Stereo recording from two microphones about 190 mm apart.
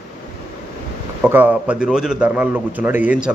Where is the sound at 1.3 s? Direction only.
10° right (ahead or behind).